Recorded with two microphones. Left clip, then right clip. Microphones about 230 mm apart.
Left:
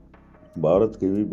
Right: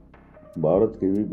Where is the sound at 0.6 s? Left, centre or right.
Left.